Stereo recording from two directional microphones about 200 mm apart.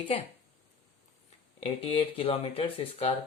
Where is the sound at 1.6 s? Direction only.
30° left (ahead or behind).